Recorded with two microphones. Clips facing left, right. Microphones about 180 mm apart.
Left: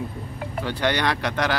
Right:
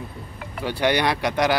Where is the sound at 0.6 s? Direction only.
10° right (ahead or behind).